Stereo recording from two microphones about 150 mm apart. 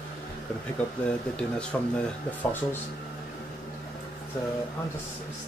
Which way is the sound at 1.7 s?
15° left (ahead or behind).